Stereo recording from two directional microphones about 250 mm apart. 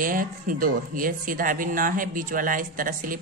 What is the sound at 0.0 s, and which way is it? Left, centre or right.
Speech, right.